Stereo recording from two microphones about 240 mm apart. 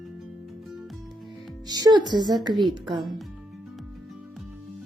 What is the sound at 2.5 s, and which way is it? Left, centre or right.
Speech, centre.